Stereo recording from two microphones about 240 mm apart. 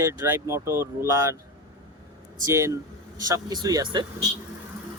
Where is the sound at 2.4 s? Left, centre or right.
Centre.